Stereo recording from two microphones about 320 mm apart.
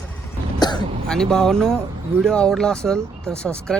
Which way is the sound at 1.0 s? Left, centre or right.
Centre.